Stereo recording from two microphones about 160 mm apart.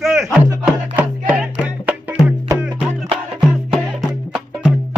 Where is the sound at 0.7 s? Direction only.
10° right (ahead or behind).